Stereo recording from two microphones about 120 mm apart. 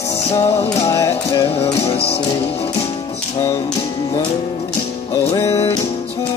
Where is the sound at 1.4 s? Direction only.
55° left (ahead or behind).